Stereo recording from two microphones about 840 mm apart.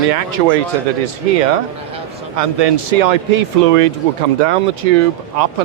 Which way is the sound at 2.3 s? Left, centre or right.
Right.